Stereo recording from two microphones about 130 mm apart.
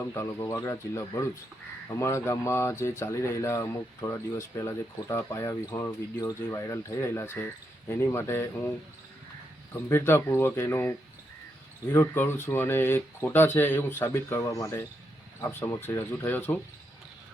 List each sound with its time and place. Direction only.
0.0 s speech: 20° left (ahead or behind)
9.9 s speech: 20° left (ahead or behind)